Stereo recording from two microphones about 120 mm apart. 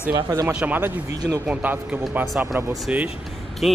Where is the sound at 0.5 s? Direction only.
15° right (ahead or behind).